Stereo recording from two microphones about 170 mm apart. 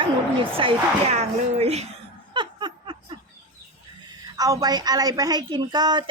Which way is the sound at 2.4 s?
25° right (ahead or behind).